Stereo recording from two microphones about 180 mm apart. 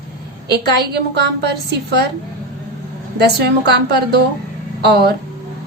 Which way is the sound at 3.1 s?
65° right (ahead or behind).